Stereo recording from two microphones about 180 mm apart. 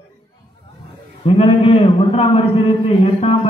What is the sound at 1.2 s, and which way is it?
A man's voice, 30° left (ahead or behind).